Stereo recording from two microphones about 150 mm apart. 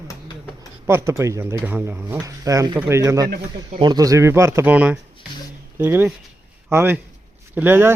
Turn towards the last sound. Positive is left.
turn(degrees=-15)  # may be behind; listen again after turning